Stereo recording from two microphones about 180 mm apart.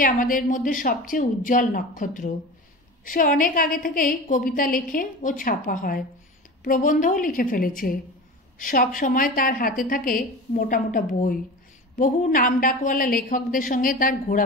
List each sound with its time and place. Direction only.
0.0 s a woman's voice: 50° left (ahead or behind)